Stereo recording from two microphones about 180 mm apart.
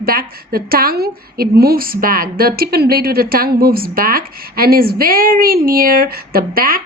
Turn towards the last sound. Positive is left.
turn(degrees=-55)  # may be behind; listen again after turning